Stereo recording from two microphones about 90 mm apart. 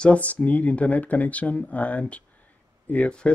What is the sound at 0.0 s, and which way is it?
Speech, 15° left (ahead or behind).